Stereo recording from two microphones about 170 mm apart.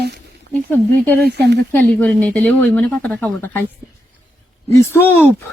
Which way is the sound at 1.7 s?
10° left (ahead or behind).